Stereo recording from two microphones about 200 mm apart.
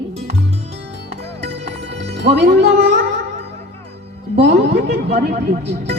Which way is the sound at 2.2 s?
55° right (ahead or behind).